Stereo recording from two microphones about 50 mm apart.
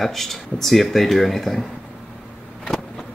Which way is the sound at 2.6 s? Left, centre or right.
Centre.